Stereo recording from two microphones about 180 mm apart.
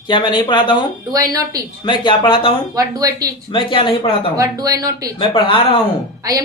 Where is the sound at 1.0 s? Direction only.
20° right (ahead or behind).